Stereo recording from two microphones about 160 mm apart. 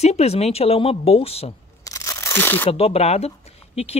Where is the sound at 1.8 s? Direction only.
20° left (ahead or behind).